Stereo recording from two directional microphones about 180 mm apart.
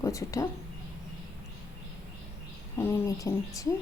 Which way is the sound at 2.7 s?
10° left (ahead or behind).